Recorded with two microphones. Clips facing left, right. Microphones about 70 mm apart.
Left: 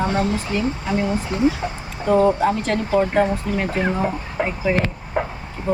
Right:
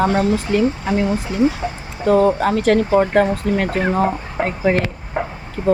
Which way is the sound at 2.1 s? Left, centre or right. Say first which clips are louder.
Right 2 dB; right.